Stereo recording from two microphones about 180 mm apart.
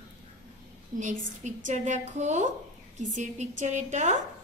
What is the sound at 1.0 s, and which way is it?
A woman's voice, 45° right (ahead or behind).